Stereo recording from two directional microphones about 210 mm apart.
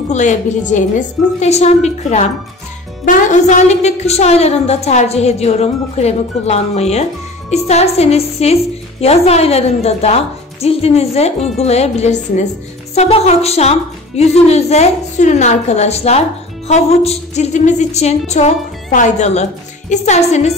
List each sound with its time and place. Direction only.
0.1 s a woman's voice: 35° left (ahead or behind)